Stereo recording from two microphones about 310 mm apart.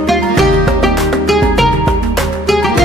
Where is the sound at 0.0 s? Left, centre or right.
Centre.